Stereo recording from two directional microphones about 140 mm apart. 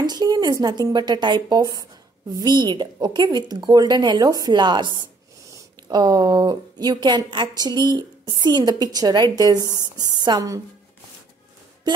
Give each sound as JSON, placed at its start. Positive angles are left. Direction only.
{"t": 0.0, "sound": "a woman's voice", "side_deg": -30}